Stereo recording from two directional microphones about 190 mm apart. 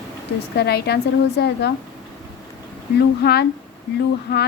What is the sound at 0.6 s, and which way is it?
A woman's voice, 60° left (ahead or behind).